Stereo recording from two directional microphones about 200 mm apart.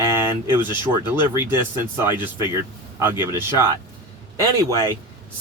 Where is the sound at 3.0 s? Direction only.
10° right (ahead or behind).